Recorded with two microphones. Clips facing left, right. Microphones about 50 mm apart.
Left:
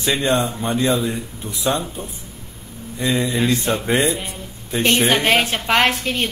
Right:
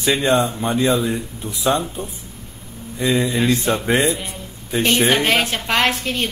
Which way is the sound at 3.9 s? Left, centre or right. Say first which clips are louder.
Right 1 dB; right.